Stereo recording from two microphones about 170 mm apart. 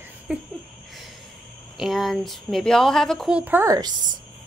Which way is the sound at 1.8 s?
Centre (ahead or behind).